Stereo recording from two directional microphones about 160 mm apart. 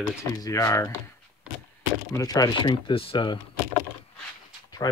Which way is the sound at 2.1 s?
20° left (ahead or behind).